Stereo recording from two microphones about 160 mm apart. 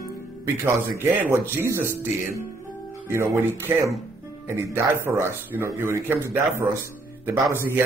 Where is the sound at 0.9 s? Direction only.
10° right (ahead or behind).